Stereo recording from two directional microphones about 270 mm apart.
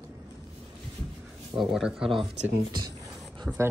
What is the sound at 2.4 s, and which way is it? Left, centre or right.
Speech, centre.